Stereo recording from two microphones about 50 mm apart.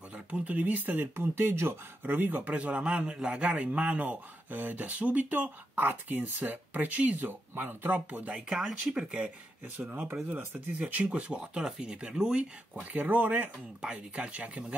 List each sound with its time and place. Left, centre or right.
0.1 s speech: right
1.1 s speech: right
2.0 s a man's voice: right
8.9 s speech: centre
9.8 s a man's voice: right
10.7 s speech: right
12.7 s a man's voice: right
13.7 s speech: right